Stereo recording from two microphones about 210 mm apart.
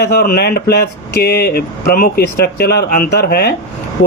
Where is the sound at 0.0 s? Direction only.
45° left (ahead or behind).